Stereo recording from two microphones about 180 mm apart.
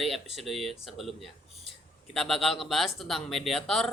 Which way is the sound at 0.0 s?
Centre (ahead or behind).